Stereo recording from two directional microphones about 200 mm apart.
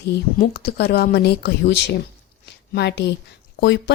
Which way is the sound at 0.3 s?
50° left (ahead or behind).